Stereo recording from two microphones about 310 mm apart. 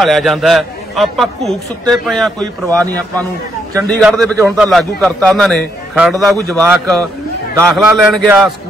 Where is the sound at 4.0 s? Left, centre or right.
Centre.